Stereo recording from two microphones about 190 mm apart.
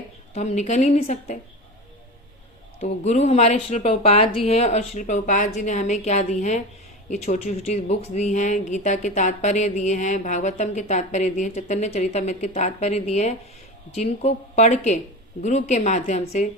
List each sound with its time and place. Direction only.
0.3 s speech: 40° left (ahead or behind)
2.8 s speech: 35° left (ahead or behind)